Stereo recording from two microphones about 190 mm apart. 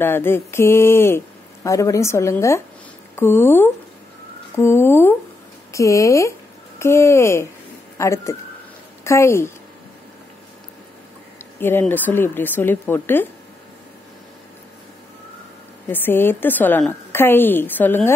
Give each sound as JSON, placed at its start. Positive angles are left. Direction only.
{"t": 0.0, "sound": "speech", "side_deg": 10}
{"t": 11.6, "sound": "speech", "side_deg": 10}
{"t": 15.9, "sound": "speech", "side_deg": 10}